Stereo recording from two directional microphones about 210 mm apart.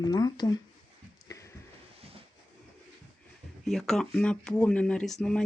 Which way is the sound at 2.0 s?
25° right (ahead or behind).